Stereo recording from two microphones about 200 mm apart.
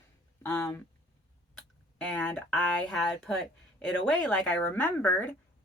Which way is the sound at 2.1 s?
10° left (ahead or behind).